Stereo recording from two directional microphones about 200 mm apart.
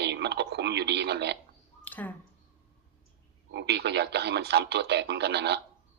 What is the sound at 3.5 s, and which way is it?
Speech, 55° right (ahead or behind).